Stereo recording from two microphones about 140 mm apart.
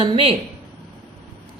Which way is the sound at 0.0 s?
40° right (ahead or behind).